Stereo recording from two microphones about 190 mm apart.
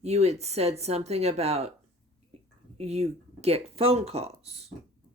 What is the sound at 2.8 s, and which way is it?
Speech, 35° right (ahead or behind).